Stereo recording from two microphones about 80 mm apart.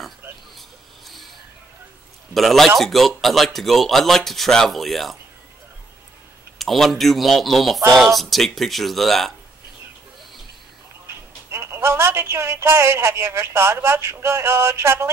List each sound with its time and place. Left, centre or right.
0.6 s a sound: centre
2.3 s speech: centre
6.6 s speech: centre
11.1 s speech: right